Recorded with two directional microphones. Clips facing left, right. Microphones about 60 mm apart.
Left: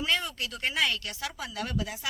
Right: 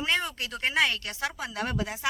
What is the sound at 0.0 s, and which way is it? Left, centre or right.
Speech, right.